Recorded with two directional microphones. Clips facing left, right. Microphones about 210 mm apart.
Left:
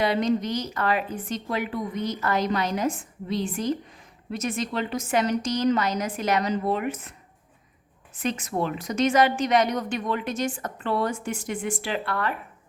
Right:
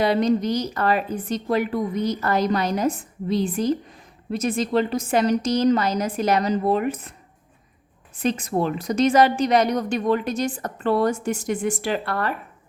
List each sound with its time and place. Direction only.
0.0 s a woman's voice: 35° right (ahead or behind)
8.2 s a woman's voice: 35° right (ahead or behind)